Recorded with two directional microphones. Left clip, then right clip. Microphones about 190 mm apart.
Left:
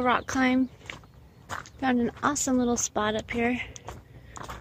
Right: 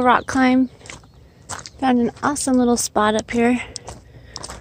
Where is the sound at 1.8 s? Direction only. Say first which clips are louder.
Right 8 dB; 20° right (ahead or behind).